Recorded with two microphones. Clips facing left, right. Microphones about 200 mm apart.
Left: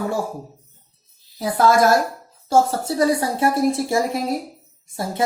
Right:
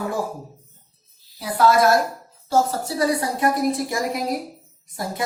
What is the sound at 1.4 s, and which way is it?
Speech, 45° left (ahead or behind).